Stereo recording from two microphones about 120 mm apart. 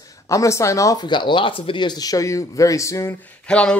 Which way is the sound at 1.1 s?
40° left (ahead or behind).